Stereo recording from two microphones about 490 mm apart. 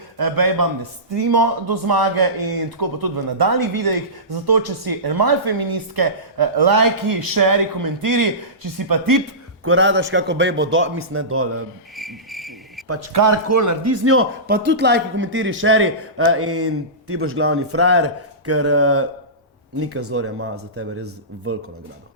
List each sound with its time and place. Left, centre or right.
0.2 s speech: right
9.6 s speech: right
11.9 s cricket: centre
12.9 s speech: right